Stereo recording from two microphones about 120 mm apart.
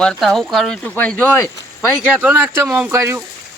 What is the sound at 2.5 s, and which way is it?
Speech, 25° right (ahead or behind).